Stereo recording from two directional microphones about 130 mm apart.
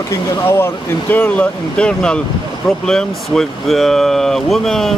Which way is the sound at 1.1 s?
10° left (ahead or behind).